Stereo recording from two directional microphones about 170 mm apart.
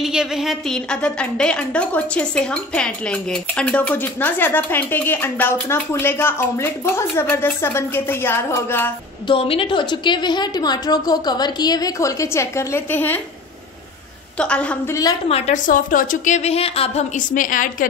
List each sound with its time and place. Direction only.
0.0 s a woman's voice: 5° right (ahead or behind); by 8.9 s 10° left (ahead or behind)
9.3 s a woman's voice: 30° left (ahead or behind); by 13.2 s 10° left (ahead or behind)
14.4 s a woman's voice: 5° left (ahead or behind)
15.2 s a woman's voice: 40° left (ahead or behind)